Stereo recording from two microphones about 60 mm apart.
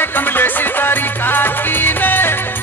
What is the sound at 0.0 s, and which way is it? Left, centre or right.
Music, left.